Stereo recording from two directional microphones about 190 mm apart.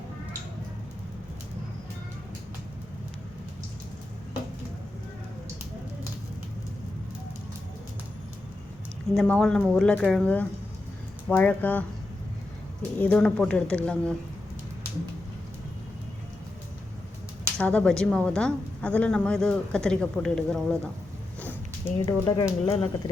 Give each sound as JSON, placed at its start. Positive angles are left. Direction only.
{"t": 9.1, "sound": "a woman's voice", "side_deg": 5}
{"t": 13.0, "sound": "a woman's voice", "side_deg": 5}
{"t": 17.6, "sound": "a woman's voice", "side_deg": 5}
{"t": 22.0, "sound": "speech", "side_deg": 25}